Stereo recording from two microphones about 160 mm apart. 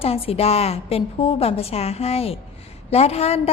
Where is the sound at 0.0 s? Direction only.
35° left (ahead or behind).